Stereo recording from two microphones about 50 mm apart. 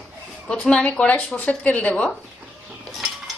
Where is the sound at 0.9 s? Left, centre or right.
Left.